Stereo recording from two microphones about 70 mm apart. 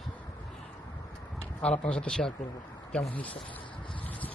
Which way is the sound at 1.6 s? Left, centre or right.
Centre.